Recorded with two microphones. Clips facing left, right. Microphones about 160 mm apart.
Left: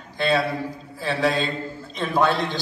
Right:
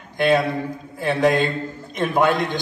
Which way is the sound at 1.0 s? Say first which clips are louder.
Right 5 dB; 20° right (ahead or behind).